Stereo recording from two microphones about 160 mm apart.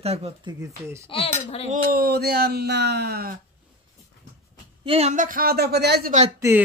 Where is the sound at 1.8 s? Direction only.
75° right (ahead or behind).